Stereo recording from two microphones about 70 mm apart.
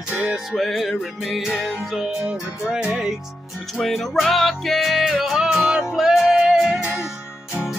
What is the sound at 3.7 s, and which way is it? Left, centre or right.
Music, centre.